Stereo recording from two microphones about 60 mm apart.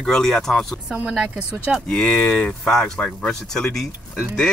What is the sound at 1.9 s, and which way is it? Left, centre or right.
Speech, centre.